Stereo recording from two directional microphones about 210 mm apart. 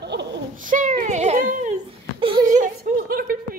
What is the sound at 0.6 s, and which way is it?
Babbling, 40° right (ahead or behind).